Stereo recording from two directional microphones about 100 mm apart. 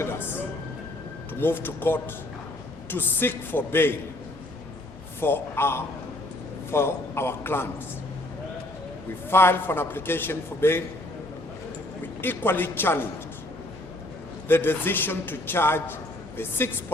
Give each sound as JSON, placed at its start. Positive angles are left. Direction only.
{"t": 0.0, "sound": "a sound", "side_deg": 20}
{"t": 1.4, "sound": "a man's voice", "side_deg": 20}
{"t": 5.2, "sound": "a man's voice", "side_deg": 25}
{"t": 9.3, "sound": "a man's voice", "side_deg": 25}
{"t": 12.2, "sound": "a man's voice", "side_deg": 20}
{"t": 14.4, "sound": "a man's voice", "side_deg": 20}